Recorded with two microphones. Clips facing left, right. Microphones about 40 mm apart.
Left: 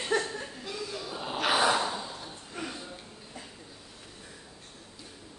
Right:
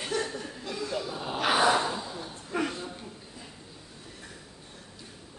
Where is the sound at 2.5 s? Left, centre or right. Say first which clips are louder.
Right 8 dB; right.